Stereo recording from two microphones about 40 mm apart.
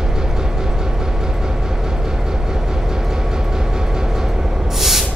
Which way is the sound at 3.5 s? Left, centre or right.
Centre.